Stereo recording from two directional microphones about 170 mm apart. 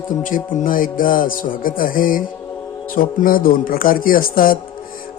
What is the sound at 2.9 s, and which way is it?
A man's voice, 55° left (ahead or behind).